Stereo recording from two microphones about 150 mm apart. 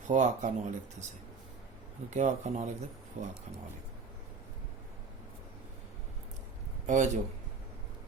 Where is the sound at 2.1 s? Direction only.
55° right (ahead or behind).